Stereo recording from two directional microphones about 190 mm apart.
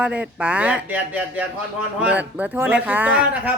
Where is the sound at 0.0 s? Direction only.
5° right (ahead or behind).